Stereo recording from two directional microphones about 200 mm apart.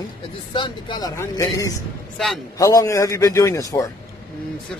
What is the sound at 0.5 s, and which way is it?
Speech, 25° left (ahead or behind).